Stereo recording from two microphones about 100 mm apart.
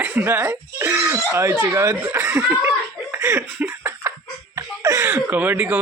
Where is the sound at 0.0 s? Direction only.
20° right (ahead or behind).